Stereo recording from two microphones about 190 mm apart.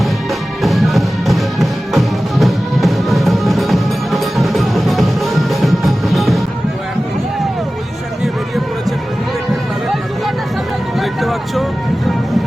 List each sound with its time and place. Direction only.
0.6 s music: centre (ahead or behind)
11.0 s vehicle: centre (ahead or behind)